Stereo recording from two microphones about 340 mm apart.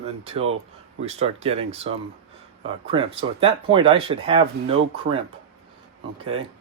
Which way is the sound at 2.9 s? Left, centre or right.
Centre.